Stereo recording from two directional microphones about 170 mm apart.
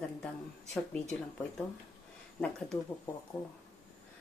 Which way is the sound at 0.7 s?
Centre (ahead or behind).